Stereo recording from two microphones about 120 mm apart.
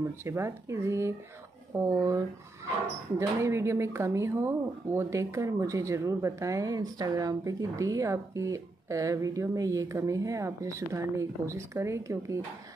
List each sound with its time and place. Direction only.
0.0 s speech: 25° right (ahead or behind)